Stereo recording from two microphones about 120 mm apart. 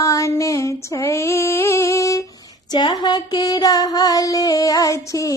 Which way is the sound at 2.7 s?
40° left (ahead or behind).